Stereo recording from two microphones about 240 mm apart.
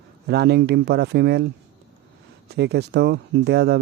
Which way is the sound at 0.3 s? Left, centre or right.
Right.